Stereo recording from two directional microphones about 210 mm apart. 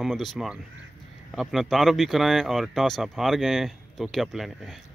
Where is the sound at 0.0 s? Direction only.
Centre (ahead or behind).